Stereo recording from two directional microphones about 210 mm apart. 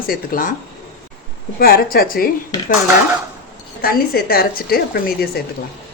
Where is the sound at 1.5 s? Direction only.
45° left (ahead or behind).